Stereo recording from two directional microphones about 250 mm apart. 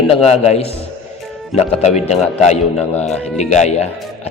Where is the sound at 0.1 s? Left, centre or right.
Left.